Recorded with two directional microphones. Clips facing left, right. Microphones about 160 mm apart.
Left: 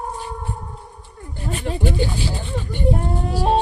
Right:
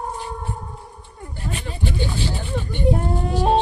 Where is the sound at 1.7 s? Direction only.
50° left (ahead or behind).